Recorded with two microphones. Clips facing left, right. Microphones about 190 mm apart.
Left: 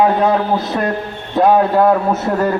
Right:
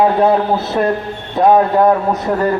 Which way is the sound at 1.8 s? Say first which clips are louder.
Even; 15° right (ahead or behind).